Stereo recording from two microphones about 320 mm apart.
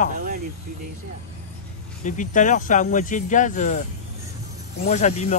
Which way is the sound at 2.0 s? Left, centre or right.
Left.